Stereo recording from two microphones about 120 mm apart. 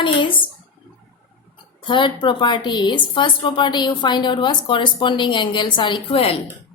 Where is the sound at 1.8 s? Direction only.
40° left (ahead or behind).